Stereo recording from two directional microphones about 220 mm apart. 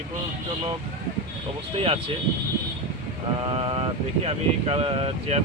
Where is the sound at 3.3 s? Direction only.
25° right (ahead or behind).